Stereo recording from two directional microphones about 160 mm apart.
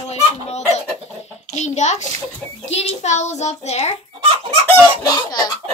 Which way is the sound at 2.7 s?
45° left (ahead or behind).